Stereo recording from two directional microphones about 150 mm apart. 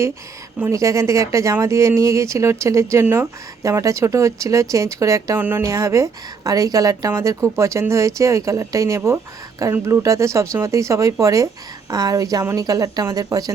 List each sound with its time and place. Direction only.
0.6 s speech: 20° right (ahead or behind)